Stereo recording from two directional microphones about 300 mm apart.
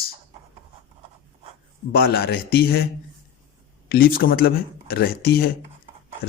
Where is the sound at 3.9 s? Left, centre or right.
Left.